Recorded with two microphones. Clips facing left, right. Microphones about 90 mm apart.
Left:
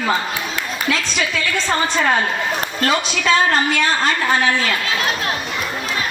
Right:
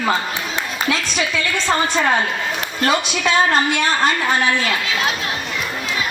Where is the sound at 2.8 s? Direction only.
20° right (ahead or behind).